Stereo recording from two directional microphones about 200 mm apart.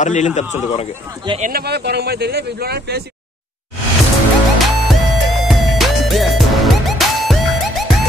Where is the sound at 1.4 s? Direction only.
50° right (ahead or behind).